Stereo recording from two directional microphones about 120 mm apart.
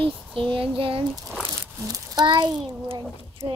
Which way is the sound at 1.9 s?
35° right (ahead or behind).